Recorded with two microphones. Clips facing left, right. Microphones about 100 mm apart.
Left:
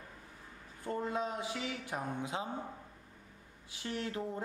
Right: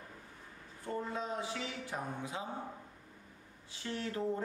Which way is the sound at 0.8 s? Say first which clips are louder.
Left 2 dB; 15° left (ahead or behind).